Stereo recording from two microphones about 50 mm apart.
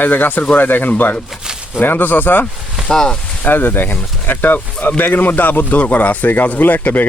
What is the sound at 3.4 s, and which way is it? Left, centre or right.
Speech, left.